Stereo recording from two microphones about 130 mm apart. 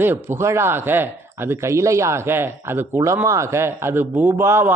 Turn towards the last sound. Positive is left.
turn(degrees=-20)  # may be behind; listen again after turning